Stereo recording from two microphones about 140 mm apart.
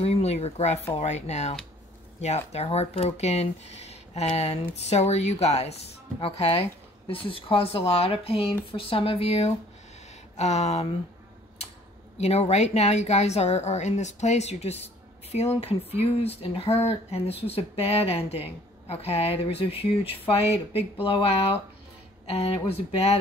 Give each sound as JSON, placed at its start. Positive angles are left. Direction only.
{"t": 0.0, "sound": "speech", "side_deg": 50}
{"t": 12.2, "sound": "speech", "side_deg": 50}